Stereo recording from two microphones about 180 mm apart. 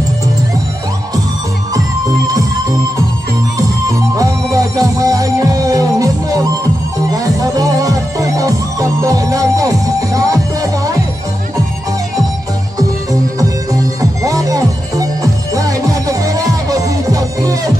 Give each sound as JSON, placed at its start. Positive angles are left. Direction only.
{"t": 4.2, "sound": "music", "side_deg": -20}
{"t": 14.2, "sound": "music", "side_deg": -20}